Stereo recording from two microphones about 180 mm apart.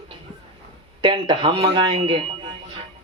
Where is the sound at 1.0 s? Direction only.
30° right (ahead or behind).